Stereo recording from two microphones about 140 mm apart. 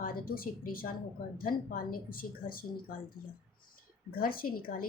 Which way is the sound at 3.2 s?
15° left (ahead or behind).